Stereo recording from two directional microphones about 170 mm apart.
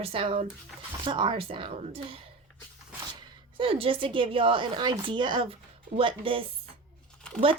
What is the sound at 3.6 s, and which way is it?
Speech, 35° right (ahead or behind).